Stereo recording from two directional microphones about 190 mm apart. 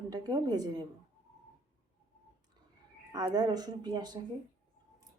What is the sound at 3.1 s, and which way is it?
Speech, 20° right (ahead or behind).